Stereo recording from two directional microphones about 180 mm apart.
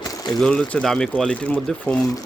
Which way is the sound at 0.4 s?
5° left (ahead or behind).